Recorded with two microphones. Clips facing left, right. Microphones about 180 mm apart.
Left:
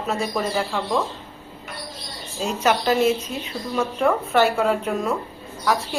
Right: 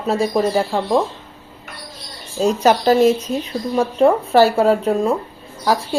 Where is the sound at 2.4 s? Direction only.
35° right (ahead or behind).